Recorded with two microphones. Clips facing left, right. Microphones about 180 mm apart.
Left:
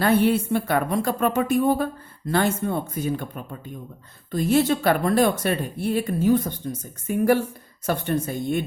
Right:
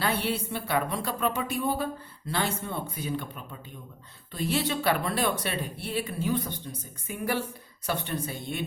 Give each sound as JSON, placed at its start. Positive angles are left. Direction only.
{"t": 0.0, "sound": "a woman's voice", "side_deg": 50}